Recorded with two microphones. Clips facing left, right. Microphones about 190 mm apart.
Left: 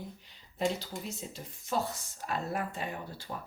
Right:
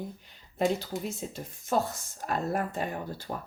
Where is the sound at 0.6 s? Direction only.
50° right (ahead or behind).